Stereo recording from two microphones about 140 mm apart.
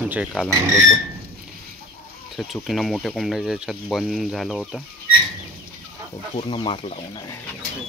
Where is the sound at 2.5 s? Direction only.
Centre (ahead or behind).